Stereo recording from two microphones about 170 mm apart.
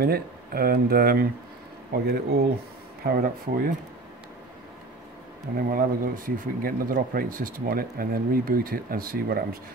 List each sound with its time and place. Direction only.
0.0 s speech: 65° right (ahead or behind)
5.6 s speech: 55° right (ahead or behind)